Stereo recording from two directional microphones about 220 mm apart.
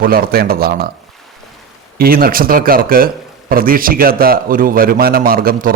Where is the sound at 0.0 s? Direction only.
40° right (ahead or behind).